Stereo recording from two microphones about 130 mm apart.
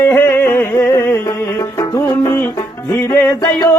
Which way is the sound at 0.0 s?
20° left (ahead or behind).